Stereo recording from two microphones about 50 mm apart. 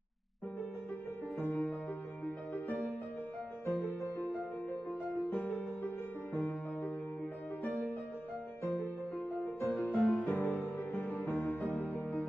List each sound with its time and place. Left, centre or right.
1.4 s music: left
3.6 s music: left
5.3 s music: left
9.4 s music: left